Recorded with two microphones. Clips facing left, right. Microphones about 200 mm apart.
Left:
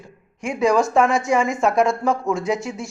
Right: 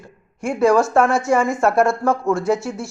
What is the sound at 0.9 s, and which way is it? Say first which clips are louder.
Speech: right 1 dB; centre (ahead or behind).